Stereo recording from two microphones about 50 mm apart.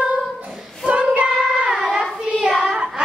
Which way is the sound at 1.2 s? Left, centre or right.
Right.